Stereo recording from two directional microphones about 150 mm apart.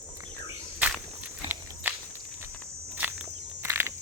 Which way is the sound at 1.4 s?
10° right (ahead or behind).